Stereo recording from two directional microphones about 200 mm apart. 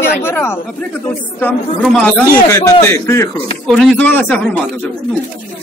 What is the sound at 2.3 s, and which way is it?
Speech, 15° left (ahead or behind).